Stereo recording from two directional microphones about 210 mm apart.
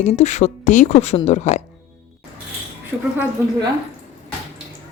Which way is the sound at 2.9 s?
5° right (ahead or behind).